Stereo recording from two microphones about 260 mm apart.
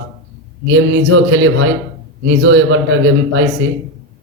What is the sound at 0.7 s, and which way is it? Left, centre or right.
A man's voice, right.